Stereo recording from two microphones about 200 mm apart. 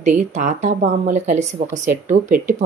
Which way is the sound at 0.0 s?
35° right (ahead or behind).